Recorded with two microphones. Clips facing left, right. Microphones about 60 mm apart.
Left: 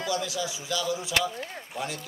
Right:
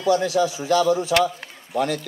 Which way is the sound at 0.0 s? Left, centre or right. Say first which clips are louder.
Right 11 dB; right.